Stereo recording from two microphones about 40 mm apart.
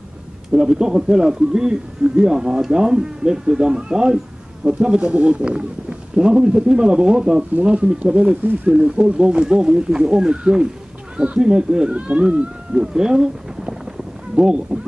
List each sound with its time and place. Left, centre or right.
0.5 s speech: centre; by 12.4 s right
12.7 s speech: centre